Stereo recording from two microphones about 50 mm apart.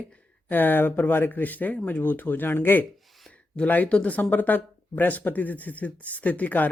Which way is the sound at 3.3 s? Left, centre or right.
Left.